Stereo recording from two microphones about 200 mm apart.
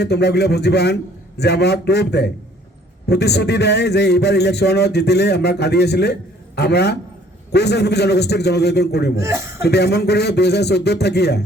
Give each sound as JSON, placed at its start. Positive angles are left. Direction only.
{"t": 0.0, "sound": "a man's voice", "side_deg": 55}
{"t": 9.2, "sound": "a man's voice", "side_deg": -15}
{"t": 9.6, "sound": "a man's voice", "side_deg": 55}